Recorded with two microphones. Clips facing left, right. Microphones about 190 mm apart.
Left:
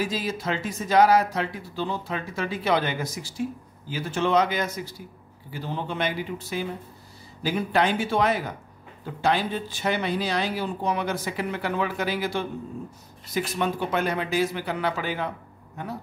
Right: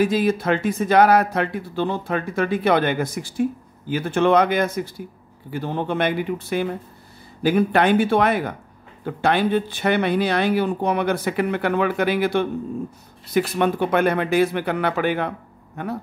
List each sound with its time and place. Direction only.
0.0 s speech: 55° right (ahead or behind)